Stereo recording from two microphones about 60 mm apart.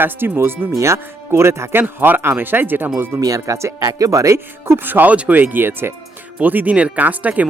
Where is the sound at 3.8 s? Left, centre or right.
Right.